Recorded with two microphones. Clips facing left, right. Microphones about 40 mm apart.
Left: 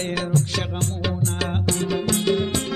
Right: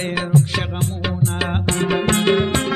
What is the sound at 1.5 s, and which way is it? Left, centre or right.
Music, right.